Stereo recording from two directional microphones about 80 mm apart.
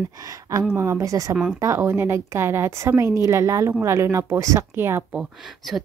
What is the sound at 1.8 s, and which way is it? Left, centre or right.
A woman's voice, right.